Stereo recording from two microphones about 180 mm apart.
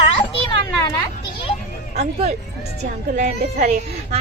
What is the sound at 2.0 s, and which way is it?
A woman's voice, 35° right (ahead or behind).